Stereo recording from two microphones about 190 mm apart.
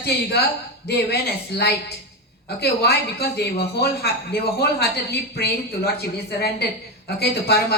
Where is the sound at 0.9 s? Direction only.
60° left (ahead or behind).